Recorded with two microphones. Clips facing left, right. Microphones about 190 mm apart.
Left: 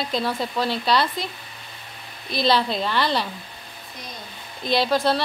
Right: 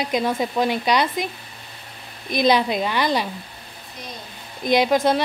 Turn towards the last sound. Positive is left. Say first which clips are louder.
# right 3 dB
turn(degrees=-15)  # may be behind; listen again after turning